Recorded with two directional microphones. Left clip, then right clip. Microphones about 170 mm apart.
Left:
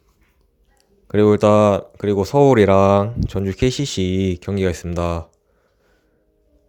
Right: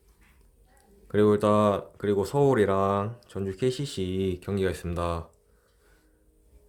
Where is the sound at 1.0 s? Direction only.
40° left (ahead or behind).